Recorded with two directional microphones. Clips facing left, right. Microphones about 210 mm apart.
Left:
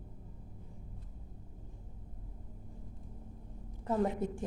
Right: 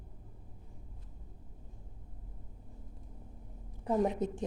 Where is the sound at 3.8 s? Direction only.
15° right (ahead or behind).